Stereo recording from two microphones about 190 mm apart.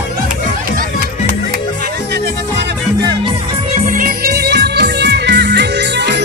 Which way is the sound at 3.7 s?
45° right (ahead or behind).